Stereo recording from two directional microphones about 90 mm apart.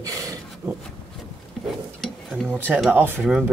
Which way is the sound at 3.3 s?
10° right (ahead or behind).